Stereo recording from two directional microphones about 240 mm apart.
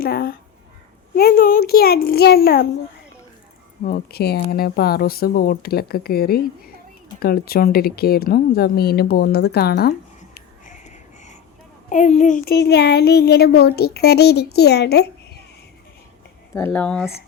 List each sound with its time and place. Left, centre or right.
0.0 s speech: left
3.8 s speech: left
10.3 s music: left
11.9 s speech: left
16.6 s speech: centre